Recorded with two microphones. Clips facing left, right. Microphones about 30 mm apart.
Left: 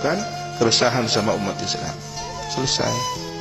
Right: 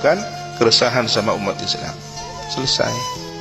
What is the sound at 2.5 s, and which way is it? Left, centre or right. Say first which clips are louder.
Speech: right 4 dB; right.